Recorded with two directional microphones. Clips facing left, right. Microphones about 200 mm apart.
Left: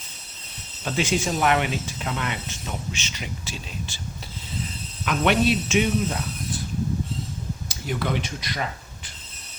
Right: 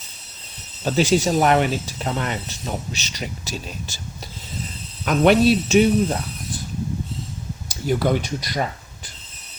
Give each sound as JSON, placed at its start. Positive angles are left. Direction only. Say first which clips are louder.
{"t": 0.9, "sound": "speech", "louder": "right 6 dB", "side_deg": -35}
{"t": 5.0, "sound": "speech", "louder": "right 6 dB", "side_deg": -40}
{"t": 7.7, "sound": "speech", "louder": "right 7 dB", "side_deg": -40}